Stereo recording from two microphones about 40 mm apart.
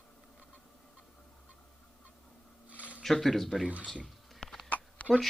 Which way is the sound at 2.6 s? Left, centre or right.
Right.